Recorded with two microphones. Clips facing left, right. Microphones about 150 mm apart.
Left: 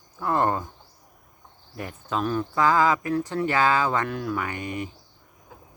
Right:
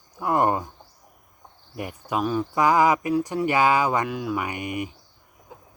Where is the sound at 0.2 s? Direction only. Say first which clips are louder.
Right 2 dB; 15° right (ahead or behind).